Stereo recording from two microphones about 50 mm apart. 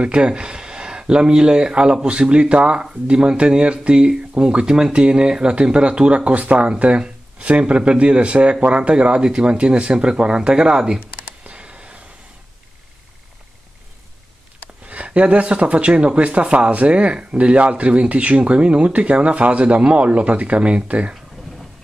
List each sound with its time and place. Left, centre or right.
0.0 s speech: right
11.4 s a sound: centre
14.9 s speech: right